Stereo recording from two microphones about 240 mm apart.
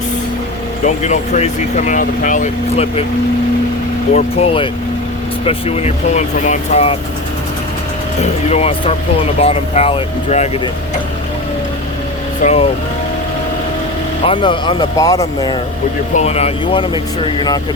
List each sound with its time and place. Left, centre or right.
0.9 s speech: left
4.1 s speech: left
8.2 s speech: left
12.4 s speech: left
14.3 s speech: centre
16.1 s speech: left